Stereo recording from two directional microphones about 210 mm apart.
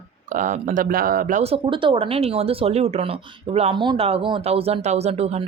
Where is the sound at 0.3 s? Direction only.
35° right (ahead or behind).